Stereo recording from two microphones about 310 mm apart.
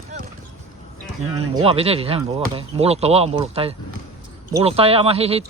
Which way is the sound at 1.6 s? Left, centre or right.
Centre.